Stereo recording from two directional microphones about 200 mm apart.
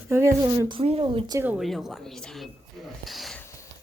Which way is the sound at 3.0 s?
Centre (ahead or behind).